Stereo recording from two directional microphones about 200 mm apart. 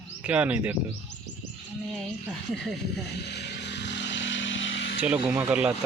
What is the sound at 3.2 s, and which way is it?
Vehicle, 55° left (ahead or behind).